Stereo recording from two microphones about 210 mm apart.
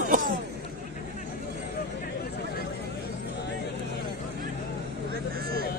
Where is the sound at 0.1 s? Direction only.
40° right (ahead or behind).